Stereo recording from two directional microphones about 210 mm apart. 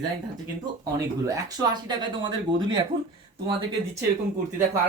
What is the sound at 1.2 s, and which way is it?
Speech, 20° right (ahead or behind).